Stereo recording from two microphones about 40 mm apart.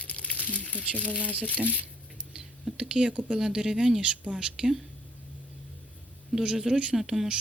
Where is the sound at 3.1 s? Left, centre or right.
Right.